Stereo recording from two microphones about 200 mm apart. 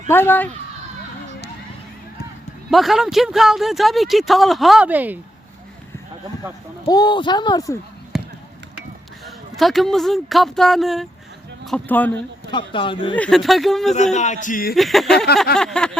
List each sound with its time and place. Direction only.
0.1 s speech: 10° left (ahead or behind)
2.6 s speech: centre (ahead or behind)
6.8 s speech: 20° left (ahead or behind)
8.1 s basketball bounce: centre (ahead or behind)
9.2 s speech: centre (ahead or behind)
12.5 s speech: 25° left (ahead or behind)
13.1 s speech: 5° left (ahead or behind)
13.9 s a man's voice: 35° left (ahead or behind)
14.8 s speech: centre (ahead or behind)